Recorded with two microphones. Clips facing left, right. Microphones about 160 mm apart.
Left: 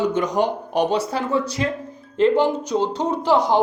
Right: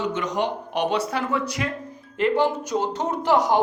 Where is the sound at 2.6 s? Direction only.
15° left (ahead or behind).